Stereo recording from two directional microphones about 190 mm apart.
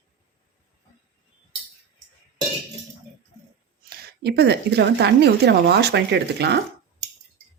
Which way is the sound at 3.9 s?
60° right (ahead or behind).